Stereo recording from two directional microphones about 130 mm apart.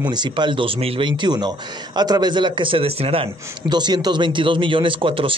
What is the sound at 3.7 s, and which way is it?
Speech, 35° right (ahead or behind).